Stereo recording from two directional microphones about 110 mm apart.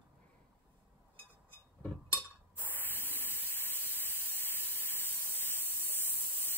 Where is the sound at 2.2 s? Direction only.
15° left (ahead or behind).